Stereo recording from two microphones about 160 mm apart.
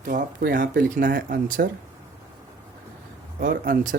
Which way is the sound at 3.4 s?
60° right (ahead or behind).